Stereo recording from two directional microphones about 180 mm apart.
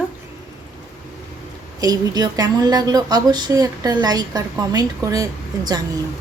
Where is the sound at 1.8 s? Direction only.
20° right (ahead or behind).